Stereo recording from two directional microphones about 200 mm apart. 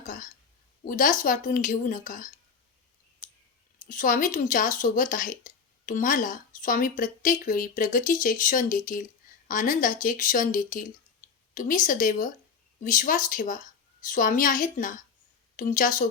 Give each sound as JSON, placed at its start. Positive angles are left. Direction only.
{"t": 0.0, "sound": "speech", "side_deg": 40}
{"t": 3.8, "sound": "speech", "side_deg": 40}